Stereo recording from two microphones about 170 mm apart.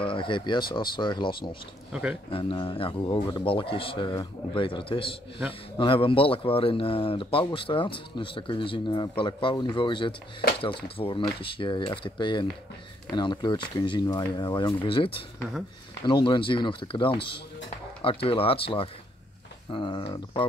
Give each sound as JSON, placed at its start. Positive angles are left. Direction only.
{"t": 0.0, "sound": "speech", "side_deg": 30}
{"t": 1.9, "sound": "speech", "side_deg": -5}
{"t": 2.3, "sound": "speech", "side_deg": 30}